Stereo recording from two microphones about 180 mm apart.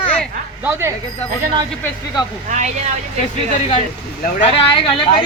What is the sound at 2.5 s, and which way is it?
Speech, 40° right (ahead or behind).